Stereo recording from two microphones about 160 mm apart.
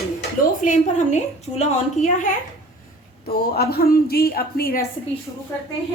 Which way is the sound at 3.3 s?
75° left (ahead or behind).